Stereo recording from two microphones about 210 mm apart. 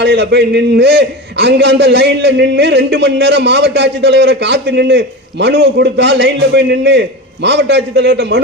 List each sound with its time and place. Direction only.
0.0 s a man's voice: 55° right (ahead or behind)